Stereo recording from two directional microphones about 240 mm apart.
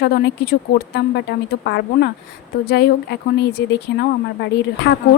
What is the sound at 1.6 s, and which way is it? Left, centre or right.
Speech, left.